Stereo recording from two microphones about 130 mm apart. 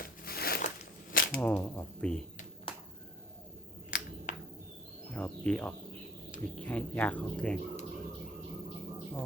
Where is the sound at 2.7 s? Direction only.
45° left (ahead or behind).